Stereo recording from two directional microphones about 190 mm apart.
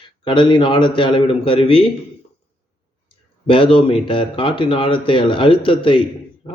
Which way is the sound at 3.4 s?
25° left (ahead or behind).